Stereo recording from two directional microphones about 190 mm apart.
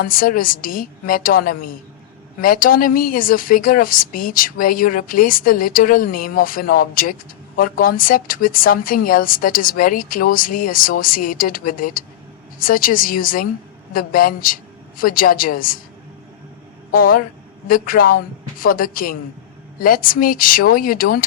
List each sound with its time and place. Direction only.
0.0 s a woman's voice: 50° left (ahead or behind)
16.9 s a woman's voice: 45° left (ahead or behind)